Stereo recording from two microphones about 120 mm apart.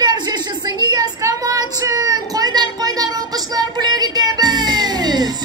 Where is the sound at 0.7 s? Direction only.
35° right (ahead or behind).